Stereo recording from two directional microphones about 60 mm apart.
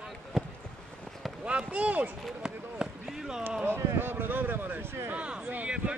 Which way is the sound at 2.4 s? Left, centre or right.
Centre.